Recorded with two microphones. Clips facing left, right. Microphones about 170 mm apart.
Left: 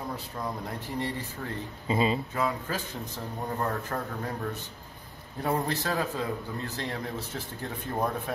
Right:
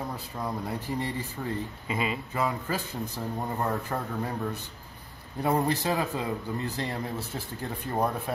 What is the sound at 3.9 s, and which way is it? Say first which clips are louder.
Speech: right 1 dB; 10° right (ahead or behind).